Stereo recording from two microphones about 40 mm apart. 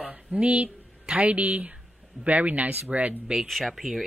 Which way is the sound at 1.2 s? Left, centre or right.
Right.